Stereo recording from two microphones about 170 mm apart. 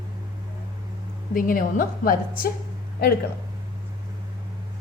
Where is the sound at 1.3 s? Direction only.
55° left (ahead or behind).